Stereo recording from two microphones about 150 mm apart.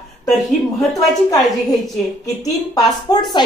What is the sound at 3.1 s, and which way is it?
Speech, 30° left (ahead or behind).